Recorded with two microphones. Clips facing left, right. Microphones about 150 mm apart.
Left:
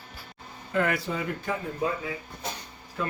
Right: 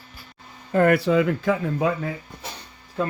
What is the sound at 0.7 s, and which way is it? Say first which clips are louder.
Speech: right 8 dB; 45° right (ahead or behind).